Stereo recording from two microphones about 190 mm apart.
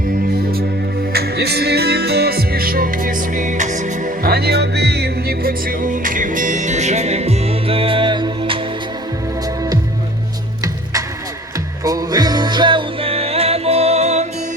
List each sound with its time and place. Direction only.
1.1 s music: 55° right (ahead or behind); by 8.6 s 25° right (ahead or behind)
11.8 s music: 20° right (ahead or behind); by 14.3 s 35° right (ahead or behind)